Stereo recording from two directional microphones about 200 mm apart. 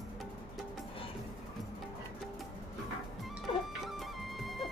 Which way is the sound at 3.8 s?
Centre (ahead or behind).